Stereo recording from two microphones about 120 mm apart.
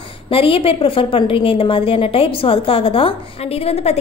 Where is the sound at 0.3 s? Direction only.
50° left (ahead or behind).